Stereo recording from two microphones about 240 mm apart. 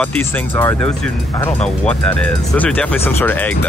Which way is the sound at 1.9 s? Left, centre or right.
Centre.